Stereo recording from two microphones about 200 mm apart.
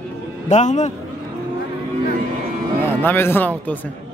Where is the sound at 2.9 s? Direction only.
10° left (ahead or behind).